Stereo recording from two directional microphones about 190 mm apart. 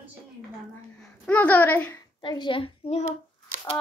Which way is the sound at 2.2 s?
25° left (ahead or behind).